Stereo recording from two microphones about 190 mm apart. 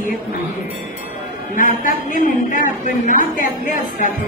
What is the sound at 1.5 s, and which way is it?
Speech, 45° left (ahead or behind).